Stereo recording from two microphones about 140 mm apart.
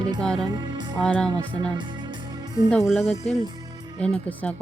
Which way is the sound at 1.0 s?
5° left (ahead or behind).